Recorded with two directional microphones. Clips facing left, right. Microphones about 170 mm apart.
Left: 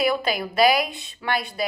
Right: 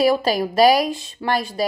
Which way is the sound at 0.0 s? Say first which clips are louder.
Right 5 dB; 40° right (ahead or behind).